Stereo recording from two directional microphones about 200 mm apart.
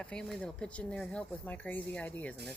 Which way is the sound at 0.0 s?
5° left (ahead or behind).